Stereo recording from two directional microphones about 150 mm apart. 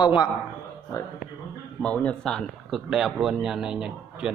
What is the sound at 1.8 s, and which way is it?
A man's voice, 5° left (ahead or behind).